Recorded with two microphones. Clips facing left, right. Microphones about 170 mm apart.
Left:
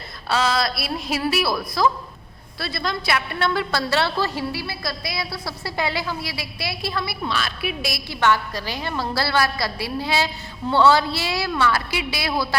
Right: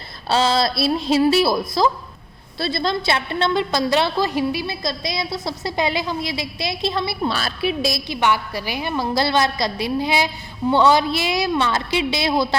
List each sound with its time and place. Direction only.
0.3 s a woman's voice: 30° right (ahead or behind)